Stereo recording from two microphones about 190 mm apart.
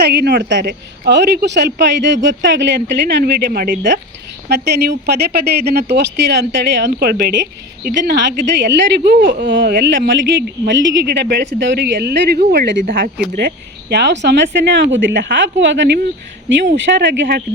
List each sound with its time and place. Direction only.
0.0 s speech: 60° right (ahead or behind)